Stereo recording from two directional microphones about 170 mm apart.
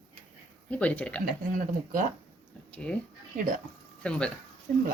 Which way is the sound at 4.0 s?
5° left (ahead or behind).